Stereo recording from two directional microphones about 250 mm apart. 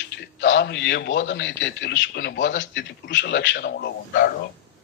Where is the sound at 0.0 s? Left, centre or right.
Left.